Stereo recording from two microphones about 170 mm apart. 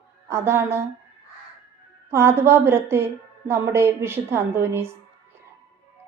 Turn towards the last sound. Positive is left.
turn(degrees=-15)  # may be behind; listen again after turning